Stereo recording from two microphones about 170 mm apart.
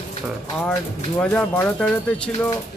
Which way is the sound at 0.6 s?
5° left (ahead or behind).